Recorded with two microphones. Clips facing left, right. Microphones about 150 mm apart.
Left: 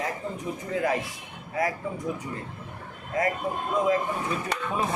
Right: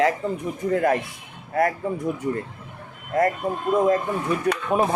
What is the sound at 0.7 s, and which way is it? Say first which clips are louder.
Speech: right 6 dB; 50° right (ahead or behind).